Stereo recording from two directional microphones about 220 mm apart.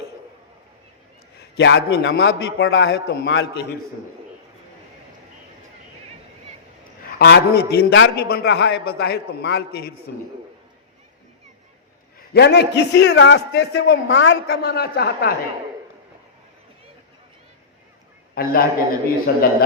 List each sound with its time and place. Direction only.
1.4 s a man's voice: 50° left (ahead or behind)
7.2 s a man's voice: 50° left (ahead or behind)
12.3 s a man's voice: 50° left (ahead or behind)
18.4 s a man's voice: 45° left (ahead or behind)